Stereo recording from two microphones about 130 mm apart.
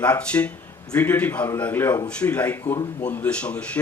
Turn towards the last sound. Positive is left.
turn(degrees=10)  # may be behind; listen again after turning